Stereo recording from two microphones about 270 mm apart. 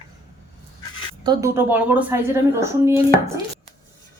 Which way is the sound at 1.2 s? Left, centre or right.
Centre.